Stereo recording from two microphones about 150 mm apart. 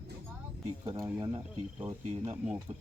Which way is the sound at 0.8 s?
25° right (ahead or behind).